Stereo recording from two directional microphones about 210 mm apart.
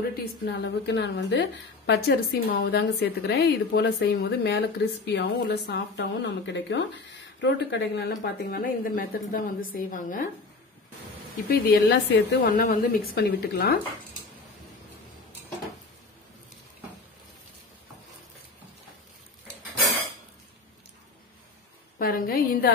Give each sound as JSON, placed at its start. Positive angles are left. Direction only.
{"t": 0.1, "sound": "a woman's voice", "side_deg": 50}
{"t": 11.4, "sound": "a woman's voice", "side_deg": 50}
{"t": 21.9, "sound": "a woman's voice", "side_deg": 45}